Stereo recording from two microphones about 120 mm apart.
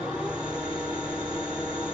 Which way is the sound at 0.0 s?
10° right (ahead or behind).